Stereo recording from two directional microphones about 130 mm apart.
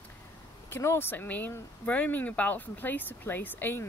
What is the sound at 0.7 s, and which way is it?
Speech, 20° left (ahead or behind).